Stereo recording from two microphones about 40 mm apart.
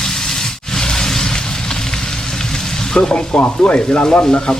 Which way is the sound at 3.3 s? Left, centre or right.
Left.